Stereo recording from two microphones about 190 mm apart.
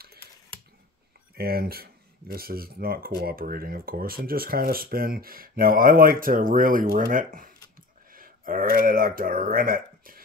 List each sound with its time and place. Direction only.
1.3 s speech: 50° right (ahead or behind)